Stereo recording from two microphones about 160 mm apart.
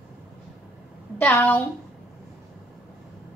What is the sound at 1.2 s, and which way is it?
Speech, 5° left (ahead or behind).